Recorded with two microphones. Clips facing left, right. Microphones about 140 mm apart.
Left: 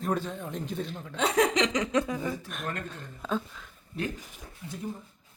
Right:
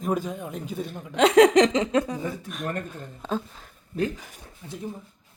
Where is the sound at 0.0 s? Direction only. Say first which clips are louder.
Right 3 dB; 10° right (ahead or behind).